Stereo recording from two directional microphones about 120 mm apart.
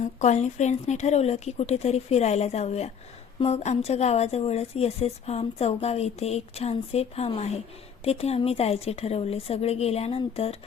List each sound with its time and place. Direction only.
0.0 s a woman's voice: 75° left (ahead or behind); by 10.6 s 55° left (ahead or behind)